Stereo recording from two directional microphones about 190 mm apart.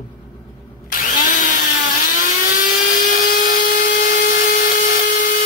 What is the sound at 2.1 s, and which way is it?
Helicopter, 45° left (ahead or behind).